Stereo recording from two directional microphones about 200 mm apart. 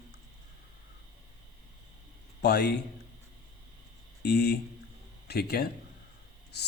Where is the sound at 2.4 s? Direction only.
55° left (ahead or behind).